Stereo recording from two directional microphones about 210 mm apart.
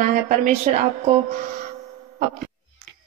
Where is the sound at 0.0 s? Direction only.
30° right (ahead or behind).